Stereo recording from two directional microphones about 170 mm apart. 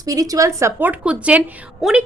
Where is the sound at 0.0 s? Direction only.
20° right (ahead or behind).